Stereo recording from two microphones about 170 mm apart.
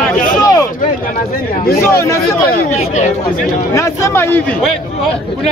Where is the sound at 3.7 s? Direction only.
15° left (ahead or behind).